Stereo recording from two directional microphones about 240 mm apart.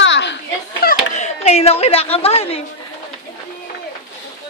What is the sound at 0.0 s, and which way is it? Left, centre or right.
Children playing, left.